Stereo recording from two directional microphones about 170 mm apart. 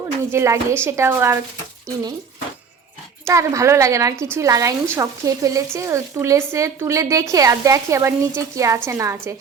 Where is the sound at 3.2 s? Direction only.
20° right (ahead or behind).